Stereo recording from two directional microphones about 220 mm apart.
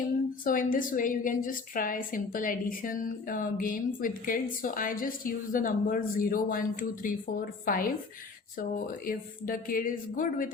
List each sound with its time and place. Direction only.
0.4 s a woman's voice: 40° left (ahead or behind)